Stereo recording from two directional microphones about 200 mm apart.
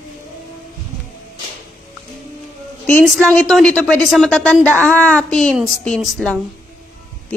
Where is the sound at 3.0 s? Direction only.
5° left (ahead or behind).